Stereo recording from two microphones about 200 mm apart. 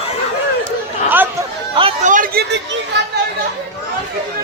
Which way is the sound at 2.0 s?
40° right (ahead or behind).